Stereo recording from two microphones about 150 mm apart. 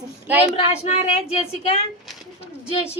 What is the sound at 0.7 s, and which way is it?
A woman's voice, 45° left (ahead or behind).